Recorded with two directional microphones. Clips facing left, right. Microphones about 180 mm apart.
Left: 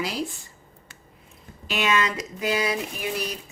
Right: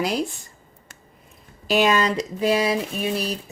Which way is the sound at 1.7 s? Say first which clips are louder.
Right 5 dB; 35° right (ahead or behind).